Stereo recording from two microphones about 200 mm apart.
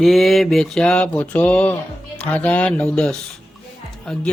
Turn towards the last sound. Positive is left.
turn(degrees=0)  # may be behind; listen again after turning